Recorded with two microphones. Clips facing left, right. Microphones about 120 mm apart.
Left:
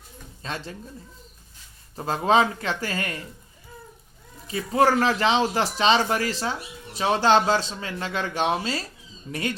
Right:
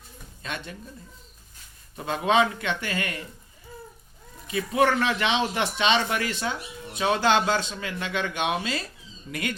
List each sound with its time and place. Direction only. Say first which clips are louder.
0.4 s speech: left 2 dB; 30° left (ahead or behind)
2.0 s speech: left 2 dB; 35° left (ahead or behind)
4.4 s speech: left 2 dB; 35° left (ahead or behind)